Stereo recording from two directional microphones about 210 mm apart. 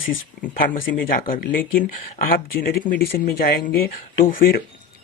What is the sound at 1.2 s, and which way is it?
Speech, 40° left (ahead or behind).